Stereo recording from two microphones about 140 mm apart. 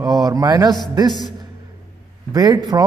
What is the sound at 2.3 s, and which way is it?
Speech, 30° right (ahead or behind).